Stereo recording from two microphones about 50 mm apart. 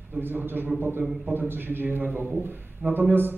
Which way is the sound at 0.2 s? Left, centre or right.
Right.